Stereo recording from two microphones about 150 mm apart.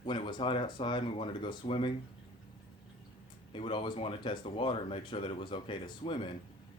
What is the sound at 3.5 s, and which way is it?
Speech, 35° left (ahead or behind).